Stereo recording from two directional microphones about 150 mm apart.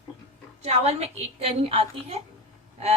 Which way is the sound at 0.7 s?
45° right (ahead or behind).